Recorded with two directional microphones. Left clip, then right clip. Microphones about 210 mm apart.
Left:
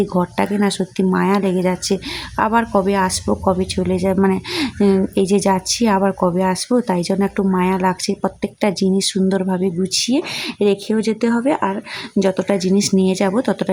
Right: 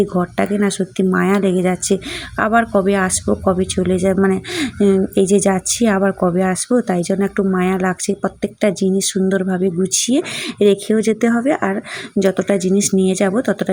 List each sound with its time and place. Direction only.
0.0 s speech: centre (ahead or behind)